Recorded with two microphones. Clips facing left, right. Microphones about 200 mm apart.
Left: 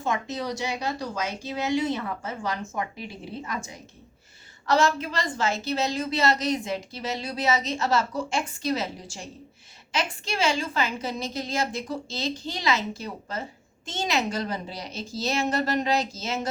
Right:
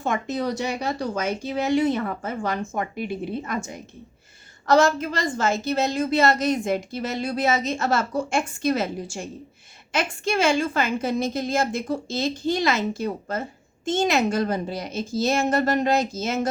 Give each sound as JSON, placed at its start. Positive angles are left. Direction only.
{"t": 0.0, "sound": "a woman's voice", "side_deg": -55}